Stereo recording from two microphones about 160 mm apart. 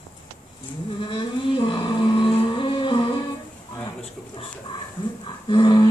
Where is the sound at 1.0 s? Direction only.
35° left (ahead or behind).